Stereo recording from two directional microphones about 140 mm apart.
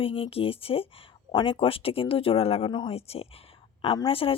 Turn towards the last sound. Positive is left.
turn(degrees=40)  # may be behind; listen again after turning